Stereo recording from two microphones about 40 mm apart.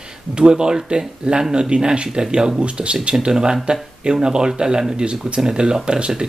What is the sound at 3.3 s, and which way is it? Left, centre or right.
Speech, centre.